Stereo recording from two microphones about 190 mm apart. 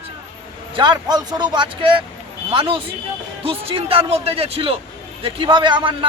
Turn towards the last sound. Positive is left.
turn(degrees=-25)  # may be behind; listen again after turning